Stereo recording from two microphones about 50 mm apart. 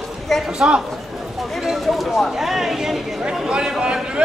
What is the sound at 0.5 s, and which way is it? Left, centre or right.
Speech, centre.